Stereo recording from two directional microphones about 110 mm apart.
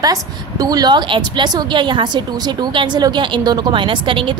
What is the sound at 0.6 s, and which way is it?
A woman's voice, 35° right (ahead or behind).